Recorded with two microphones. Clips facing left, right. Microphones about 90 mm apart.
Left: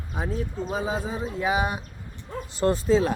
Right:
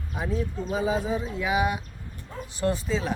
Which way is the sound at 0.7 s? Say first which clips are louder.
Right 4 dB; 30° left (ahead or behind).